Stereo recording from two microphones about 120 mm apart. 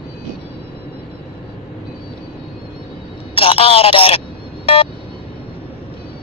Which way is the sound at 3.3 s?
50° left (ahead or behind).